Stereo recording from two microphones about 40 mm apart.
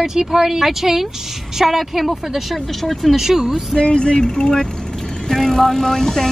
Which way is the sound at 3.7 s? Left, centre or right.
Left.